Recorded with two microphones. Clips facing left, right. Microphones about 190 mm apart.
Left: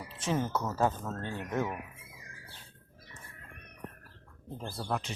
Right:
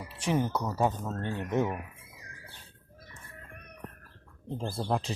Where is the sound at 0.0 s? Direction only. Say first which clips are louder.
Right 3 dB; 10° right (ahead or behind).